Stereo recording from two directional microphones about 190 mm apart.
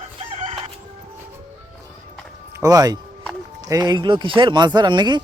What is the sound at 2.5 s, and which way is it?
Speech, 15° right (ahead or behind).